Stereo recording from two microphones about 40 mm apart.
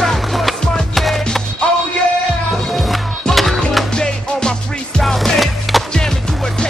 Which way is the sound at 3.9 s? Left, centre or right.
Centre.